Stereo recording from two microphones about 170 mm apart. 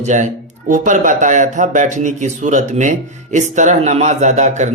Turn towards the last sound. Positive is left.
turn(degrees=-45)  # may be behind; listen again after turning